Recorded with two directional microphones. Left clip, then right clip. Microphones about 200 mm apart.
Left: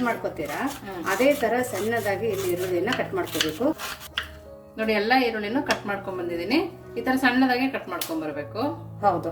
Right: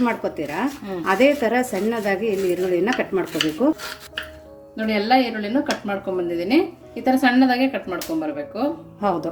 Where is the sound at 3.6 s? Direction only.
30° right (ahead or behind).